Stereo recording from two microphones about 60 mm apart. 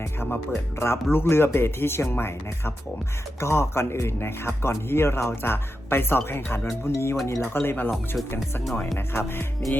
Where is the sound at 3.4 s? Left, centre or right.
Left.